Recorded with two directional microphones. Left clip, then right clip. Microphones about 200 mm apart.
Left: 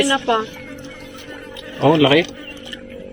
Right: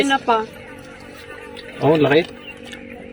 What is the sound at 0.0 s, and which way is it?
Speech, centre (ahead or behind).